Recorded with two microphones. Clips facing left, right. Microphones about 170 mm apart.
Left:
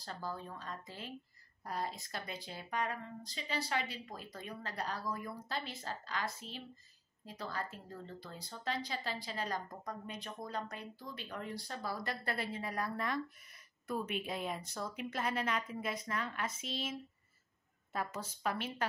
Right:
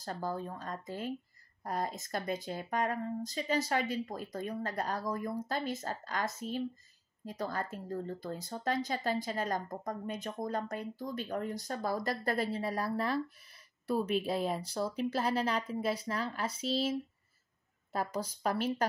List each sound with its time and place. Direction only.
0.0 s speech: 45° right (ahead or behind)
17.9 s speech: 35° right (ahead or behind)